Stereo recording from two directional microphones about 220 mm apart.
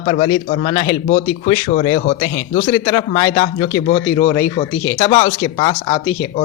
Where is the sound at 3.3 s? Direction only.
30° left (ahead or behind).